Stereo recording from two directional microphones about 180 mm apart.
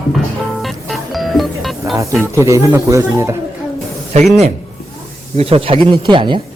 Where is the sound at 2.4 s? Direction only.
15° right (ahead or behind).